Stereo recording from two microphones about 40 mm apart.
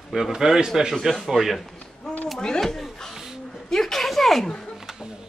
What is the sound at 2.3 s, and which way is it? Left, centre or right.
Speech, centre.